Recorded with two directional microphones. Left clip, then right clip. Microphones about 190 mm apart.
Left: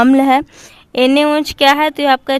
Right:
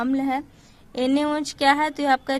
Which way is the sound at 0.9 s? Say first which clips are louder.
Left 11 dB; 25° left (ahead or behind).